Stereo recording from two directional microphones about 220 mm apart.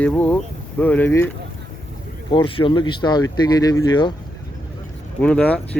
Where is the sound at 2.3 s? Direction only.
25° left (ahead or behind).